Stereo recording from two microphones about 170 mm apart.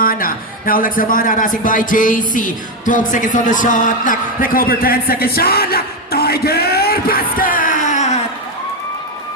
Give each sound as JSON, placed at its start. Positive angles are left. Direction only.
{"t": 0.0, "sound": "a man's voice", "side_deg": 55}